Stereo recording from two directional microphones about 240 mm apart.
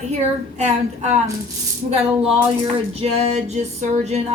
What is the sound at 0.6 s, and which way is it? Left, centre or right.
Speech, right.